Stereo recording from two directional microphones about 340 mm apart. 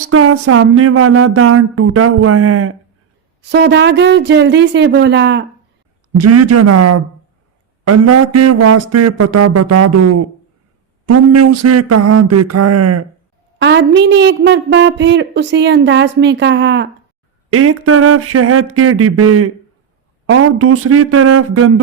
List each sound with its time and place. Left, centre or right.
0.0 s a woman's voice: right
3.4 s a woman's voice: right
6.1 s a sound: right
13.6 s a woman's voice: right